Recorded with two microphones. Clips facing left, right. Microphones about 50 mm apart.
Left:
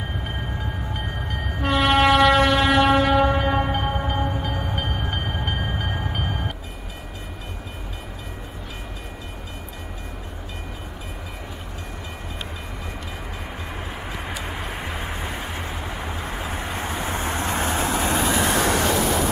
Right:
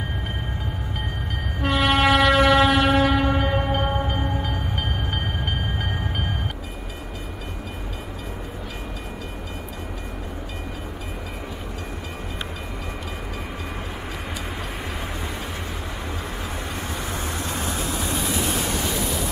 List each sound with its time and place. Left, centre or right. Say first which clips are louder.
1.6 s train: left 1 dB; centre
14.6 s vehicle: left 1 dB; left
18.2 s train: left 5 dB; left